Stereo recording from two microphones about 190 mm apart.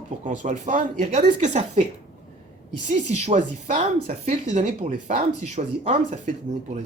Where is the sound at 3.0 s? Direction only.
40° right (ahead or behind).